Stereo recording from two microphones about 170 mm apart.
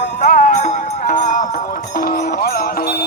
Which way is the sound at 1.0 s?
50° left (ahead or behind).